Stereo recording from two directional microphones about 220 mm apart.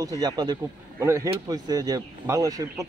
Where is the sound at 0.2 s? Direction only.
20° right (ahead or behind).